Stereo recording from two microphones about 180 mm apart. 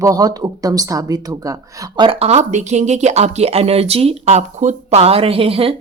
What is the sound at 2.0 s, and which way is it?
Speech, 35° right (ahead or behind).